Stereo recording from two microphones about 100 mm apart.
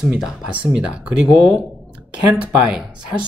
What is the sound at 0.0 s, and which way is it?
Speech, 5° right (ahead or behind).